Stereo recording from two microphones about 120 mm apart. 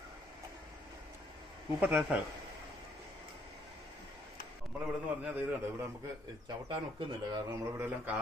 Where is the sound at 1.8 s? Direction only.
10° right (ahead or behind).